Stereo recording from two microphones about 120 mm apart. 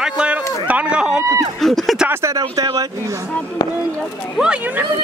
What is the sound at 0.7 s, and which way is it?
Speech, 10° right (ahead or behind).